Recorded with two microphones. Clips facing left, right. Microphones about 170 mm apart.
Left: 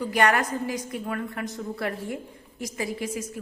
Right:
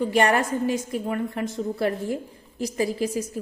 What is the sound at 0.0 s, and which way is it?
A woman's voice, 25° right (ahead or behind).